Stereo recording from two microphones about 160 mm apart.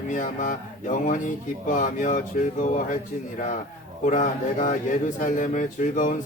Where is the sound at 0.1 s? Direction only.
55° left (ahead or behind).